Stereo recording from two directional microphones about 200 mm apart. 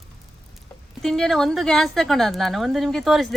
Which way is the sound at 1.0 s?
Centre (ahead or behind).